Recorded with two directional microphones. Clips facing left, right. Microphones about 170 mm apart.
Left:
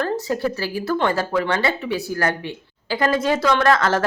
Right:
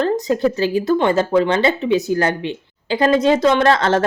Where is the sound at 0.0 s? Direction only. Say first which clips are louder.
Right 5 dB; 20° right (ahead or behind).